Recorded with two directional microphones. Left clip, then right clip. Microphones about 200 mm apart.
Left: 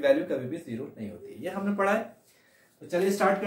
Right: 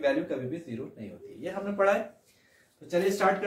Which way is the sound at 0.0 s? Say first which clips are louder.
Left 4 dB; 15° left (ahead or behind).